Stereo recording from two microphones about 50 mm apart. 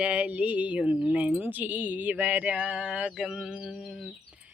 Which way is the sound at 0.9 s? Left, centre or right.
Right.